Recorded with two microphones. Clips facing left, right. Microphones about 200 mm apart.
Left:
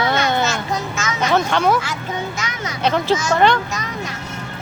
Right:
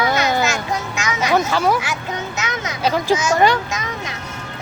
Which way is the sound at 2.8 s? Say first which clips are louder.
Even; 10° right (ahead or behind).